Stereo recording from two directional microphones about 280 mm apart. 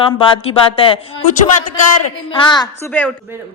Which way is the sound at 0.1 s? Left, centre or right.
Centre.